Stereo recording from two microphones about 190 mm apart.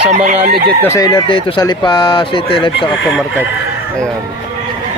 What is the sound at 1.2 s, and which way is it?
Speech, 25° left (ahead or behind).